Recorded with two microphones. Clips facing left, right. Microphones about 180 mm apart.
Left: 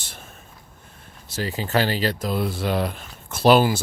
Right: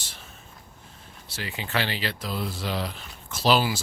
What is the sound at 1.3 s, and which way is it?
Speech, 40° left (ahead or behind).